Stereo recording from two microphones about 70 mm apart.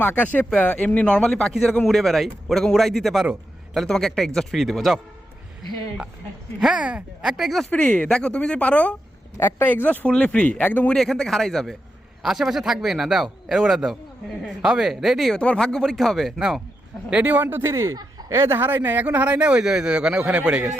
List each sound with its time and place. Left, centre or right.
0.0 s speech: left; by 4.9 s centre
6.6 s speech: centre
7.7 s speech: left
9.6 s speech: left
10.9 s speech: centre
15.4 s speech: centre
17.2 s speech: right; by 20.7 s centre